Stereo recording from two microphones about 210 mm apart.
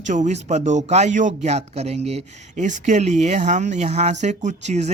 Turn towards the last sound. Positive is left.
turn(degrees=-35)  # may be behind; listen again after turning